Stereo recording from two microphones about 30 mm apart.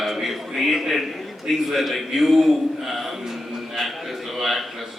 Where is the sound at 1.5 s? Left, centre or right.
Centre.